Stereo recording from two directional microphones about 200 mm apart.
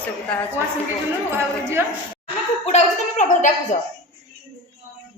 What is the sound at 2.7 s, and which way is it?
A woman's voice, 35° left (ahead or behind).